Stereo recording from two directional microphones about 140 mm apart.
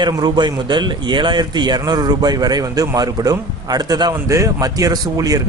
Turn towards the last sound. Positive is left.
turn(degrees=-25)  # may be behind; listen again after turning